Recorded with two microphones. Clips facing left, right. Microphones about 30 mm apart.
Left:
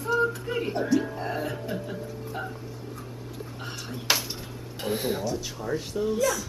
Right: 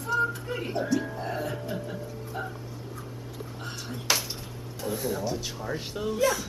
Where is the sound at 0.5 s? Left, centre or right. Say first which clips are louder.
Left 3 dB; centre.